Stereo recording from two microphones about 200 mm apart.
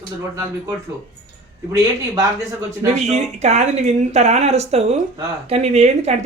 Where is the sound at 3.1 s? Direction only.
35° right (ahead or behind).